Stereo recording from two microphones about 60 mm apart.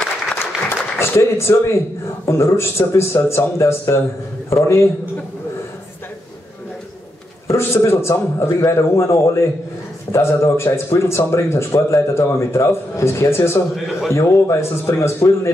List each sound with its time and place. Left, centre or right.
0.4 s a sound: left
2.2 s speech: left
7.4 s speech: left